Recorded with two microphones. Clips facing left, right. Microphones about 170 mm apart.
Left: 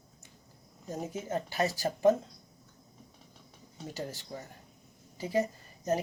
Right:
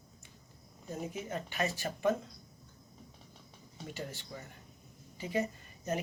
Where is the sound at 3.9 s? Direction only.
40° left (ahead or behind).